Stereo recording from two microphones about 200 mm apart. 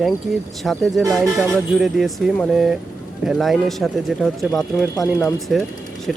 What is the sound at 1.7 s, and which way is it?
Speech, centre (ahead or behind).